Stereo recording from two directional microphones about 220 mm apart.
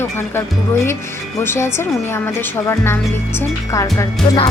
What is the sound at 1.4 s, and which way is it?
A woman's voice, 10° left (ahead or behind).